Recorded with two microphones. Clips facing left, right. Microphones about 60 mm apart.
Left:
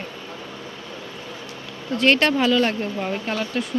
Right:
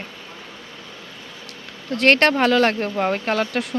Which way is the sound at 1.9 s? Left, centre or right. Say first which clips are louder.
Right 2 dB; right.